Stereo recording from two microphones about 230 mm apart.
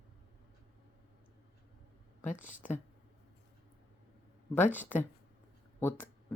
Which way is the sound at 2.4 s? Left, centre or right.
Left.